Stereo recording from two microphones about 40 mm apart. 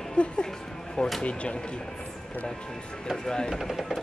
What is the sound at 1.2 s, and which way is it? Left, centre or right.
Speech, left.